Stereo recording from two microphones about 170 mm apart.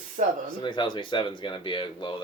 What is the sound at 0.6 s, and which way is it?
Speech, 30° left (ahead or behind).